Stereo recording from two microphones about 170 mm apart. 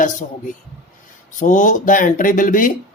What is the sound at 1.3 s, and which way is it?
Speech, 50° left (ahead or behind).